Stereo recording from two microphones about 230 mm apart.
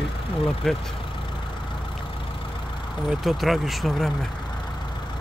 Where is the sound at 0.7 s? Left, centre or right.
Centre.